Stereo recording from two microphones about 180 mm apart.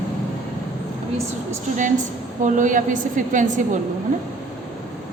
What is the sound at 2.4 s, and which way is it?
A woman's voice, 45° right (ahead or behind).